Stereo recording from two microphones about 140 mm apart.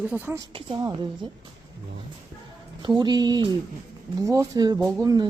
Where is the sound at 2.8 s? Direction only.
35° right (ahead or behind).